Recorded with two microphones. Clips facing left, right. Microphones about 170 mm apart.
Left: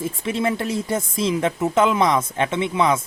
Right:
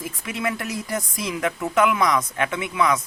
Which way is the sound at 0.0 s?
30° left (ahead or behind).